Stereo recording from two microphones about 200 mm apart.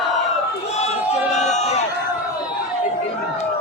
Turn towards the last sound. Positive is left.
turn(degrees=35)  # may be behind; listen again after turning